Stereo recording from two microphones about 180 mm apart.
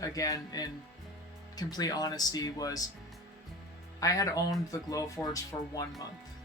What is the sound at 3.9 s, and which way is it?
Speech, 20° left (ahead or behind).